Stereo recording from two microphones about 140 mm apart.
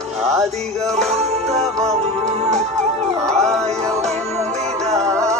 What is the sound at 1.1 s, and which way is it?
Music, 50° right (ahead or behind).